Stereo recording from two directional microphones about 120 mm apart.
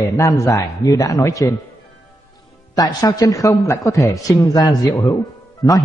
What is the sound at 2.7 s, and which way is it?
Speech, 30° left (ahead or behind).